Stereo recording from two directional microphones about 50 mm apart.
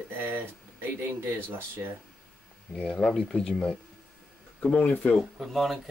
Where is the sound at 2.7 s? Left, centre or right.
Centre.